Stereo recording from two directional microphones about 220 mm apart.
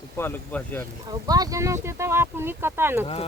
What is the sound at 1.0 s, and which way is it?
Speech, 15° right (ahead or behind).